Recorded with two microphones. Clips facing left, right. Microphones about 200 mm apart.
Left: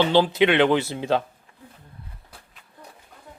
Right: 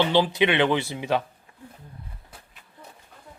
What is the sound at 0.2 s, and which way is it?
Speech, 15° right (ahead or behind).